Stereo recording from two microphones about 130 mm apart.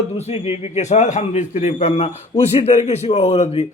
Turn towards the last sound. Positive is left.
turn(degrees=55)  # may be behind; listen again after turning